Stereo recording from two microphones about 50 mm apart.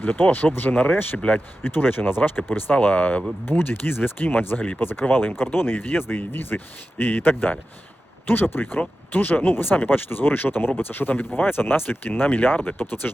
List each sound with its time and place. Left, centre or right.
0.0 s speech: left
3.4 s speech: left
4.8 s speech: left